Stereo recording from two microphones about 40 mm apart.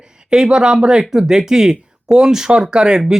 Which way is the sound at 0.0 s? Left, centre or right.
Centre.